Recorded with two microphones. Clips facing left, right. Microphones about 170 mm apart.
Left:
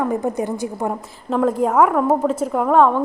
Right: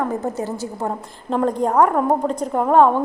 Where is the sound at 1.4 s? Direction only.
5° left (ahead or behind).